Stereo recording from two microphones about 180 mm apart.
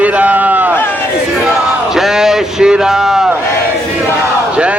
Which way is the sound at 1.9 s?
Centre (ahead or behind).